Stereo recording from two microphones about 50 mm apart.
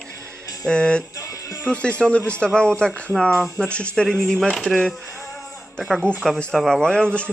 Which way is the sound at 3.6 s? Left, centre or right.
Left.